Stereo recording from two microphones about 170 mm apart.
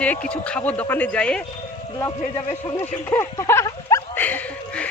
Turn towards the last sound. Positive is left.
turn(degrees=10)  # may be behind; listen again after turning